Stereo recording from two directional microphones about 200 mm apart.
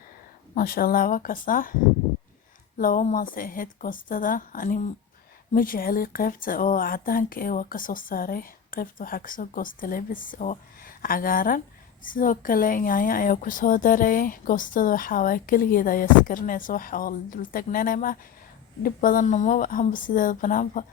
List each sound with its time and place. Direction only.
0.5 s a woman's voice: 45° left (ahead or behind)
2.7 s a woman's voice: 40° left (ahead or behind)